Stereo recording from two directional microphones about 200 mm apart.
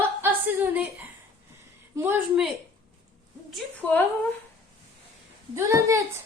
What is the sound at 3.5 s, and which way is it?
Speech, 5° left (ahead or behind).